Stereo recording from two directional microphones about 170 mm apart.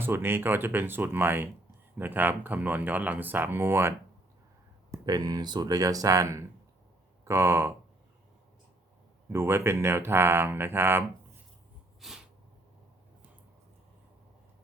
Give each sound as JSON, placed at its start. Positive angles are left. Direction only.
{"t": 0.0, "sound": "speech", "side_deg": -15}
{"t": 9.3, "sound": "speech", "side_deg": -15}
{"t": 11.9, "sound": "sneeze", "side_deg": 0}